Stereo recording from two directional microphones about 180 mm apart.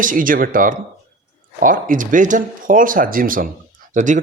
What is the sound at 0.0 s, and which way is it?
Speech, 50° right (ahead or behind).